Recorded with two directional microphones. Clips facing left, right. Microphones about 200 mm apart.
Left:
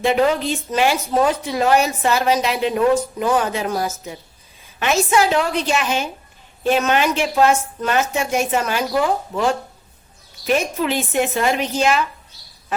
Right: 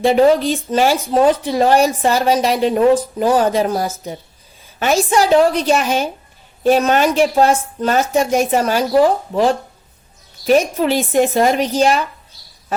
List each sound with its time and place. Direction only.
0.0 s speech: 35° right (ahead or behind)